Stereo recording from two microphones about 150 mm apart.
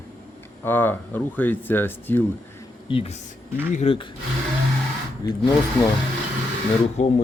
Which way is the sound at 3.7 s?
50° left (ahead or behind).